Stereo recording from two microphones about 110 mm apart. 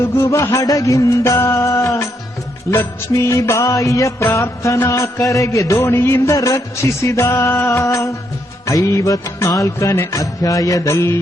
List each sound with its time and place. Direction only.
0.0 s music: 25° left (ahead or behind)